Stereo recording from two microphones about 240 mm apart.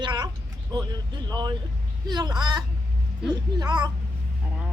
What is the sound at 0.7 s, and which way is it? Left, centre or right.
Speech, centre.